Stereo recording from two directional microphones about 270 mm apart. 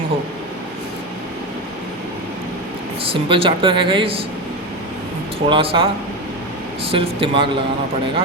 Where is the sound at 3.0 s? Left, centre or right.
Centre.